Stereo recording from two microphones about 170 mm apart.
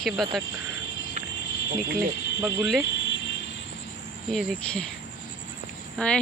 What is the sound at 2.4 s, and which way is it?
Speech, centre (ahead or behind).